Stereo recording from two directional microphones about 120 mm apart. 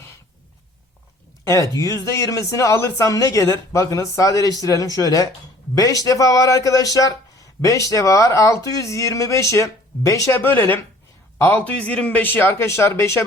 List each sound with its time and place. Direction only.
1.5 s speech: 30° left (ahead or behind)